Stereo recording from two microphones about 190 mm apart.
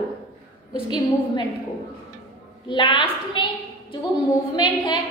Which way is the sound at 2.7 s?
25° left (ahead or behind).